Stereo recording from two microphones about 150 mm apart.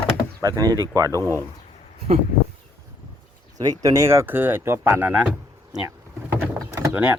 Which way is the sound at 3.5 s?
25° right (ahead or behind).